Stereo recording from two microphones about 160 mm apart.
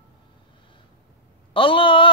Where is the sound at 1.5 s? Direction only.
35° left (ahead or behind).